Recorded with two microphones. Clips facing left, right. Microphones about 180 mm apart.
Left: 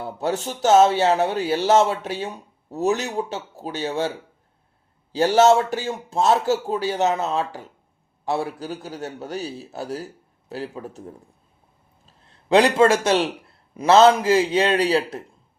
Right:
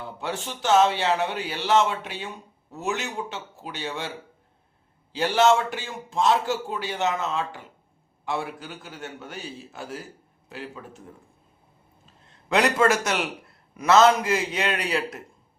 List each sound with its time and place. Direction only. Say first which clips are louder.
0.0 s a man's voice: left 7 dB; 40° left (ahead or behind)
5.1 s a man's voice: left 5 dB; 40° left (ahead or behind)
12.0 s a man's voice: left 7 dB; 35° left (ahead or behind)